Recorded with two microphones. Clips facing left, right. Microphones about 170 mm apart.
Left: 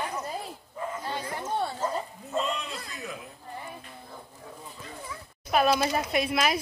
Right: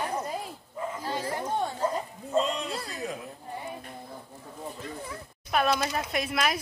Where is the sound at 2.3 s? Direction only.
35° right (ahead or behind).